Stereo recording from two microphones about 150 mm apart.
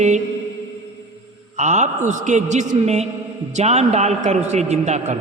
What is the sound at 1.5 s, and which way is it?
A man's voice, 50° right (ahead or behind).